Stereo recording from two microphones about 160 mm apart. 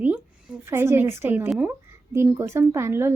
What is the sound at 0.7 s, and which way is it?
A woman's voice, 15° right (ahead or behind).